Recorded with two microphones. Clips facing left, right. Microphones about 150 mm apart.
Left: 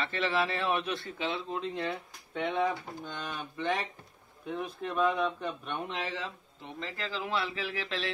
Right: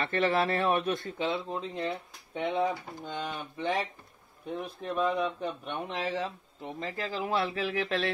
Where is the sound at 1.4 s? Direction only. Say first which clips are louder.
Even; 20° right (ahead or behind).